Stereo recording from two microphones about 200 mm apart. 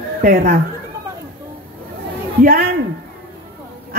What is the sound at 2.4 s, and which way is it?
Speech, 45° right (ahead or behind).